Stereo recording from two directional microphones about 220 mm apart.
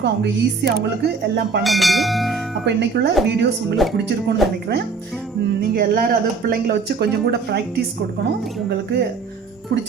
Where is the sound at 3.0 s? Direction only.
50° right (ahead or behind).